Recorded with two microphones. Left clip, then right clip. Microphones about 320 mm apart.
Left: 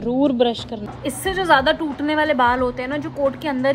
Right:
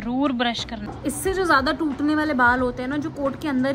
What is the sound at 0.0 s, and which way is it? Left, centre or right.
Speech, right.